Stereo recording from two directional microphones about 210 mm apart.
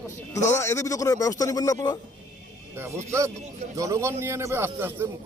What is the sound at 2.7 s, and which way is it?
A man's voice, 15° right (ahead or behind).